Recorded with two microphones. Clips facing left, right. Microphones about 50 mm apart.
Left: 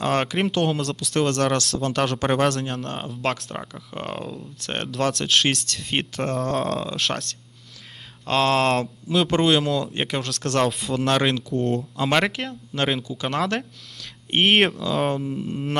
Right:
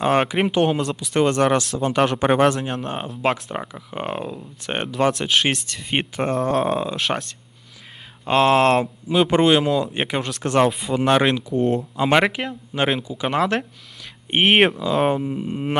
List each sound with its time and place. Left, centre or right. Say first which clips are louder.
0.0 s speech: right 4 dB; centre
15.2 s speech: right 2 dB; centre